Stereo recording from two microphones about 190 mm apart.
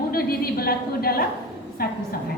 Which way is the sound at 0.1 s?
50° left (ahead or behind).